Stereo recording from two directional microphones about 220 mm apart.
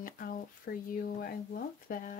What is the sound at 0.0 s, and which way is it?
Speech, 40° left (ahead or behind).